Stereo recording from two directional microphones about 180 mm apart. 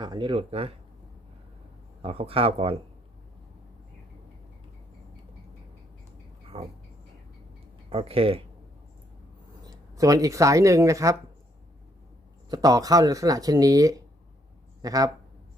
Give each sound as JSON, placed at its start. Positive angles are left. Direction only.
{"t": 0.0, "sound": "speech", "side_deg": -25}
{"t": 2.0, "sound": "speech", "side_deg": -30}
{"t": 6.5, "sound": "speech", "side_deg": -35}
{"t": 7.9, "sound": "speech", "side_deg": -30}
{"t": 9.6, "sound": "speech", "side_deg": -20}
{"t": 12.5, "sound": "speech", "side_deg": -20}